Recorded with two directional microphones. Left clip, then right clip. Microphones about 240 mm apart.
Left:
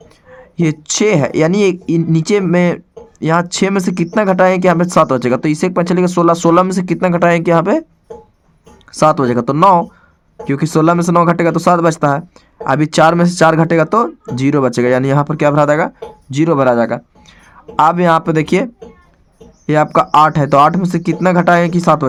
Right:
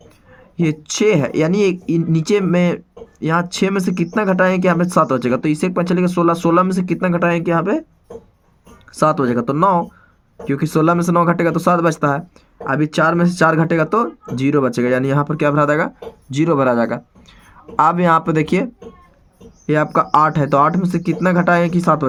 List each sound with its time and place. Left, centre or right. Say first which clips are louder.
0.3 s speech: left 3 dB; left
8.9 s speech: left 4 dB; left